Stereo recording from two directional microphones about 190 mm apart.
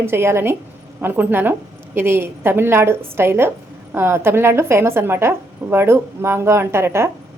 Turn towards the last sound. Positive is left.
turn(degrees=-15)  # may be behind; listen again after turning